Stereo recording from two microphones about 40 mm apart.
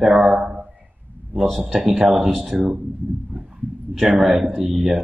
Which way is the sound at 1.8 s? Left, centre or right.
Centre.